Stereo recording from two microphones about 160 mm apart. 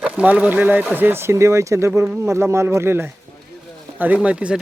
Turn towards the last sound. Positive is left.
turn(degrees=-5)  # may be behind; listen again after turning